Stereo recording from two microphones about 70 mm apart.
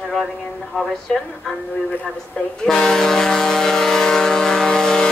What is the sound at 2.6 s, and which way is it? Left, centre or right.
Vehicle, centre.